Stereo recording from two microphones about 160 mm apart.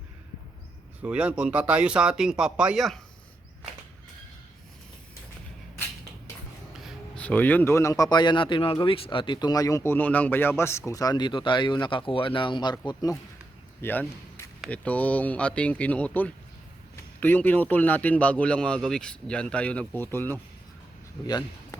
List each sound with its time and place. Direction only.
1.0 s speech: 5° right (ahead or behind)
7.2 s speech: 10° left (ahead or behind)
13.8 s speech: 10° left (ahead or behind)
21.2 s speech: 25° left (ahead or behind)